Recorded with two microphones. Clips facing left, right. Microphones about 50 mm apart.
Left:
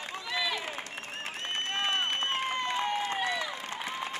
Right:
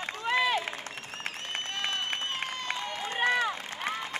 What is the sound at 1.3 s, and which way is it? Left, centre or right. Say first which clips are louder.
Run: left 5 dB; left.